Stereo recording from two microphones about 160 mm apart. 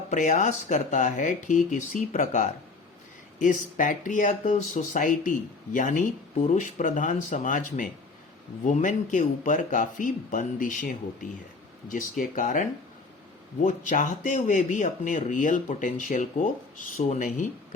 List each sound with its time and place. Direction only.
0.1 s speech: 50° left (ahead or behind)
6.3 s speech: 40° left (ahead or behind)
6.6 s speech: 55° left (ahead or behind)